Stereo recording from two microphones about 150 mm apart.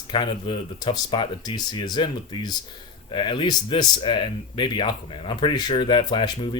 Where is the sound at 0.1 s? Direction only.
30° left (ahead or behind).